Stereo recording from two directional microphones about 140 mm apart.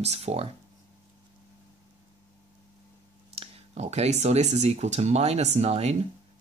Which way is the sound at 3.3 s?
45° right (ahead or behind).